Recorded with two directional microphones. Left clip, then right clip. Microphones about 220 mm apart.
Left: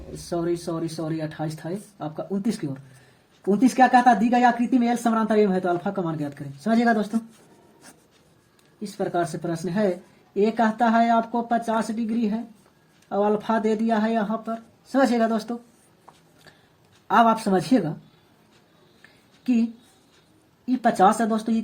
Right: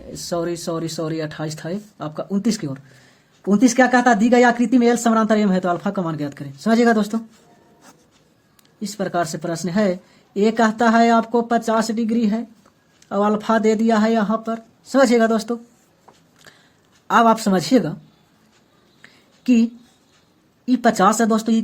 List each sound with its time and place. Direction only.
0.1 s speech: 35° right (ahead or behind)
8.8 s speech: 35° right (ahead or behind)
17.1 s speech: 35° right (ahead or behind)
20.7 s speech: 35° right (ahead or behind)